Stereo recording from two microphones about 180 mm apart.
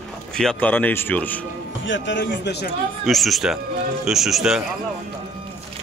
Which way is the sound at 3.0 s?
Centre (ahead or behind).